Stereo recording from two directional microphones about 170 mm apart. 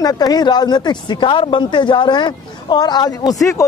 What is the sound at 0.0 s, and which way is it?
Speech, 25° left (ahead or behind).